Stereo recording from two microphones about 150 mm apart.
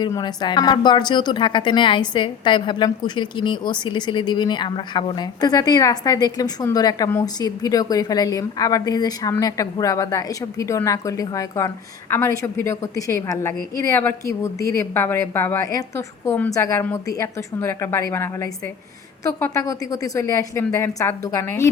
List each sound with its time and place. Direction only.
0.0 s a woman's voice: 25° left (ahead or behind)